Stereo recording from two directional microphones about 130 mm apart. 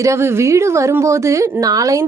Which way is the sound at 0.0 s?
20° right (ahead or behind).